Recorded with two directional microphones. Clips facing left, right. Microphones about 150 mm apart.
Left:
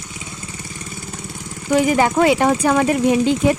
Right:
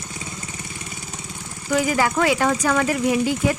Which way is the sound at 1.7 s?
25° left (ahead or behind).